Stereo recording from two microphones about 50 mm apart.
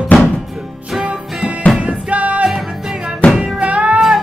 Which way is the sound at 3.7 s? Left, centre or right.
Right.